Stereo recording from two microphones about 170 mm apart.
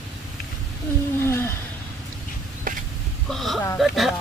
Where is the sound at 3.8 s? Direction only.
Centre (ahead or behind).